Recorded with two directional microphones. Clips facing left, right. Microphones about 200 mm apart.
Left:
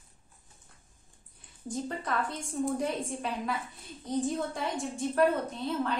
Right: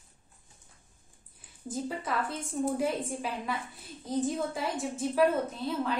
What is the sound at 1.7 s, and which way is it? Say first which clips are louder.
A woman's voice: even; 5° right (ahead or behind).